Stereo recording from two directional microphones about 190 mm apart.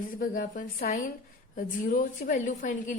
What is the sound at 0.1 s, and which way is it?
A woman's voice, 45° left (ahead or behind).